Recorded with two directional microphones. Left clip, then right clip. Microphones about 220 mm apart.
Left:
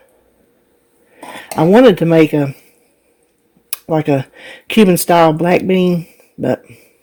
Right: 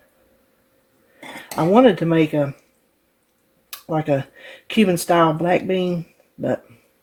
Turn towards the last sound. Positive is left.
turn(degrees=50)  # may be behind; listen again after turning